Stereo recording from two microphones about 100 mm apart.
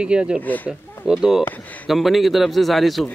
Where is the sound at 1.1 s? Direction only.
5° right (ahead or behind).